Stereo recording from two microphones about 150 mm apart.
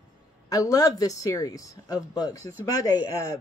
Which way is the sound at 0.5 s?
25° left (ahead or behind).